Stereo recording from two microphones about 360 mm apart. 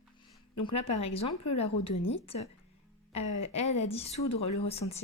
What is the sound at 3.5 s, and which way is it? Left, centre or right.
Speech, centre.